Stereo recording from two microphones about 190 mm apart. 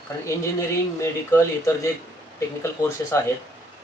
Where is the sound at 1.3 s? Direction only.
15° left (ahead or behind).